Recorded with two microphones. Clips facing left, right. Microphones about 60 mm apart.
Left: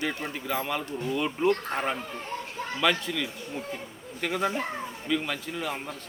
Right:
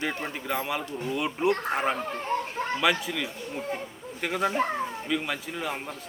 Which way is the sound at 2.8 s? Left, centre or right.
Centre.